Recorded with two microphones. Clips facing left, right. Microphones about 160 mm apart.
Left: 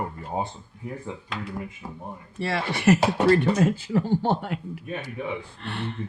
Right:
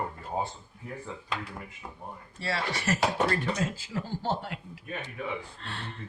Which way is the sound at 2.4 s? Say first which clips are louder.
Left 5 dB; 60° left (ahead or behind).